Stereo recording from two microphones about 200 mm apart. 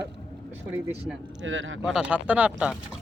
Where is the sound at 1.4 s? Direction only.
75° right (ahead or behind).